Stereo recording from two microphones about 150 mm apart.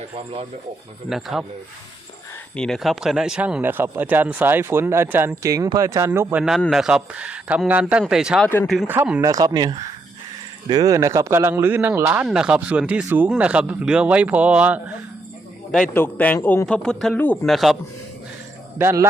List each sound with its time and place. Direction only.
1.1 s speech: centre (ahead or behind)
2.6 s speech: centre (ahead or behind); by 6.1 s 20° right (ahead or behind)
6.1 s speech: 10° right (ahead or behind)
8.9 s speech: 10° right (ahead or behind)
9.2 s speech: 25° right (ahead or behind); by 14.9 s 10° right (ahead or behind)
15.7 s speech: 5° left (ahead or behind)
18.8 s speech: 15° right (ahead or behind)